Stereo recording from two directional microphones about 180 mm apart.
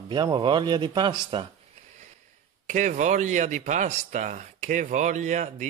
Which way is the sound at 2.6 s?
40° right (ahead or behind).